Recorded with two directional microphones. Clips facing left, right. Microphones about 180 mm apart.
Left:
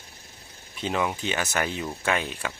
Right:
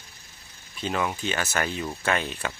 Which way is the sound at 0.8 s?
15° left (ahead or behind).